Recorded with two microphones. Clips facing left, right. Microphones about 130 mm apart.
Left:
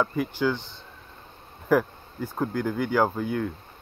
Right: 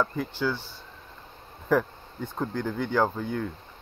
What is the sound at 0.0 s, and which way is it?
Speech, 15° left (ahead or behind).